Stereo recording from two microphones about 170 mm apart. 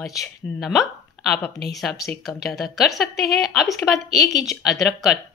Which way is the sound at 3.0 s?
65° left (ahead or behind).